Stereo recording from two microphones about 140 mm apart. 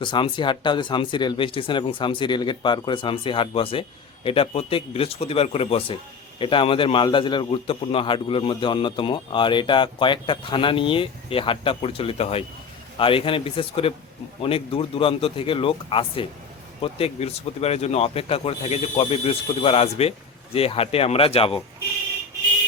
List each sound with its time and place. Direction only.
0.0 s a man's voice: 35° left (ahead or behind)